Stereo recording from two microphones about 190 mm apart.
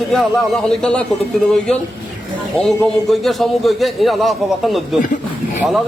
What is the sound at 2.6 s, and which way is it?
A man's voice, centre (ahead or behind).